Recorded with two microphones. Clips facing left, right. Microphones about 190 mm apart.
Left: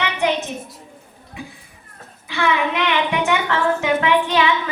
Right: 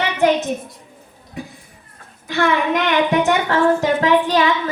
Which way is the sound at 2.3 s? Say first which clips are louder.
Right 3 dB; 45° right (ahead or behind).